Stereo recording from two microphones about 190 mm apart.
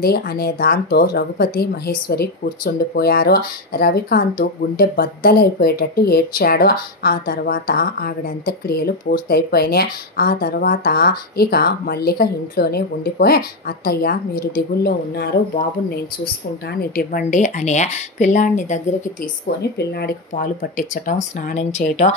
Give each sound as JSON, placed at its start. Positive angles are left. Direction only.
{"t": 0.0, "sound": "speech", "side_deg": 55}
{"t": 16.9, "sound": "a woman's voice", "side_deg": 45}
{"t": 19.6, "sound": "speech", "side_deg": 60}